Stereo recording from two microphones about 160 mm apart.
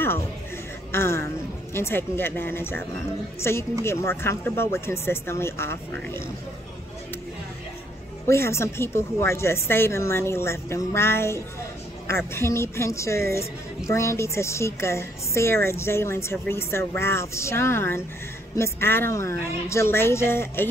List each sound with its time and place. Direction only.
0.9 s a woman's voice: 15° left (ahead or behind)
8.3 s a woman's voice: 15° left (ahead or behind)